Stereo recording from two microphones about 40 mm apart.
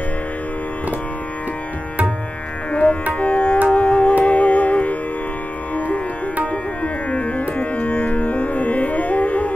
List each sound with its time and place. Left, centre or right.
2.7 s music: left
6.4 s music: left